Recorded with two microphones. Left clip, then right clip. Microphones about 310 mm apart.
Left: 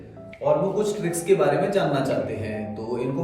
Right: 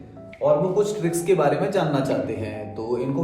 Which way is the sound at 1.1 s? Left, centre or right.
Centre.